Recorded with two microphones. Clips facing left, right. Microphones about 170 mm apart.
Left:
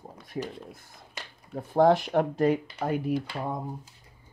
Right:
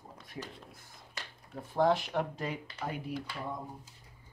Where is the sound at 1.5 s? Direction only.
50° left (ahead or behind).